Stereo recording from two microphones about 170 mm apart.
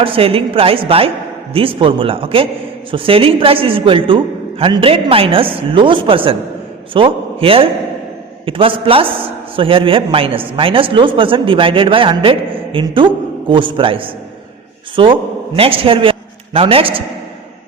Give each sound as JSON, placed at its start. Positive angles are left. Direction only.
{"t": 0.0, "sound": "a woman's voice", "side_deg": -35}